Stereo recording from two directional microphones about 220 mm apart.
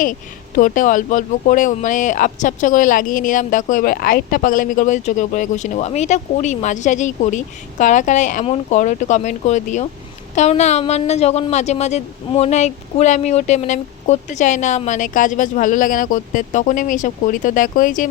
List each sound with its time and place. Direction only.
0.0 s speech: 40° left (ahead or behind)